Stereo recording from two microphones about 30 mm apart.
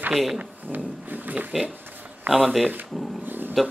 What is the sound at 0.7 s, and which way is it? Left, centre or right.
Speech, right.